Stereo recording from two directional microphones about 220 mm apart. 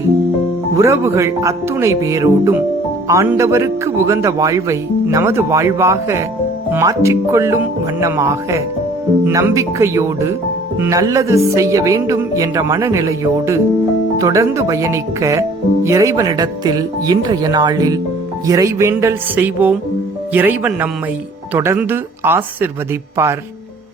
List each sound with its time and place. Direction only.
0.8 s speech: 15° right (ahead or behind)